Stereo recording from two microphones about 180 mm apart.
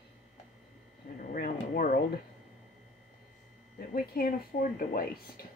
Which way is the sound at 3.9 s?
50° left (ahead or behind).